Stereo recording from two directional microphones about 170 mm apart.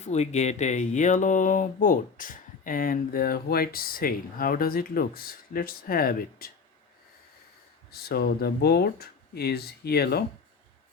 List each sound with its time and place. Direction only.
0.0 s speech: 40° left (ahead or behind); by 6.5 s 60° left (ahead or behind)
7.9 s speech: 65° left (ahead or behind)